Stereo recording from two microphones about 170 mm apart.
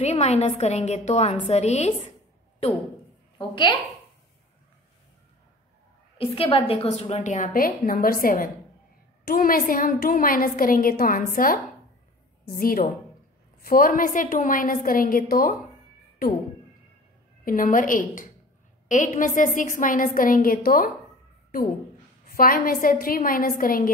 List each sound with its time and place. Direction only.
0.0 s a woman's voice: 40° left (ahead or behind)
3.3 s a woman's voice: 30° left (ahead or behind)
6.1 s a woman's voice: 35° left (ahead or behind); by 15.5 s 55° left (ahead or behind)
17.5 s a woman's voice: 55° left (ahead or behind)
22.3 s a woman's voice: 60° left (ahead or behind)